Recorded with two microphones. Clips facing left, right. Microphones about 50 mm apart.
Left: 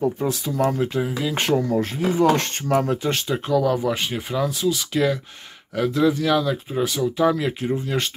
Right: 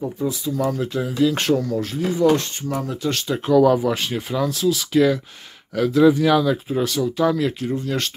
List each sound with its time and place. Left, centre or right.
0.2 s speech: left
0.7 s speech: left
2.3 s speech: left
3.0 s speech: left
3.3 s speech: centre
6.0 s speech: centre